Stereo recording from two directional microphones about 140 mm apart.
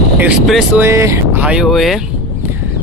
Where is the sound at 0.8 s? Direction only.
20° right (ahead or behind); by 2.0 s centre (ahead or behind).